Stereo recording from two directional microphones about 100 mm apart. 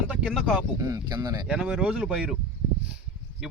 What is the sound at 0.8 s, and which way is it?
Speech, 40° right (ahead or behind).